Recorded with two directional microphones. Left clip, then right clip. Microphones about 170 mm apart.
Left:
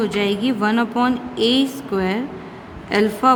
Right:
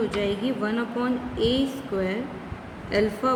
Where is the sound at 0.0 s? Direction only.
70° left (ahead or behind).